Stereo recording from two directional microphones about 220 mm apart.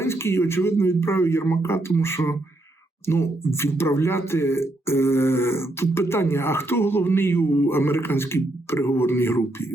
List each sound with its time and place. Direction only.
0.0 s speech: 10° left (ahead or behind)